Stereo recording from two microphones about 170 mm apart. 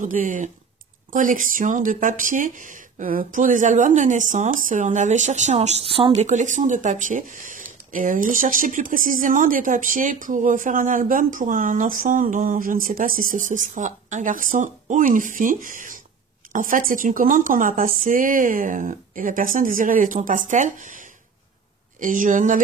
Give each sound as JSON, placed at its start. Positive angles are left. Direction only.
{"t": 0.0, "sound": "speech", "side_deg": -50}